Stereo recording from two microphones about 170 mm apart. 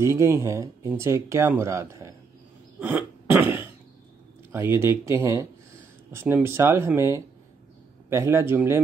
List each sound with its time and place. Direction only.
0.0 s speech: 15° right (ahead or behind)
2.8 s cough: 10° right (ahead or behind)
4.5 s speech: 15° right (ahead or behind)